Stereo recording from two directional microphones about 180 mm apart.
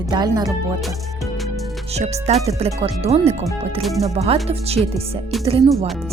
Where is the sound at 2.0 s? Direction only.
35° right (ahead or behind).